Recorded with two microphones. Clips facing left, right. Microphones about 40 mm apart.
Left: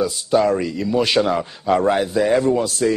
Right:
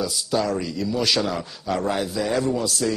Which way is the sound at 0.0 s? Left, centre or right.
Left.